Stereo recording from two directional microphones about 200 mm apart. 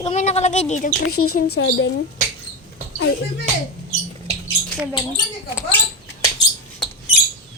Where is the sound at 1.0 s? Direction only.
90° left.